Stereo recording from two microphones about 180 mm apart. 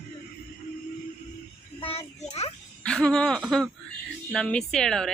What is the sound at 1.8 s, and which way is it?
Children playing, 35° left (ahead or behind).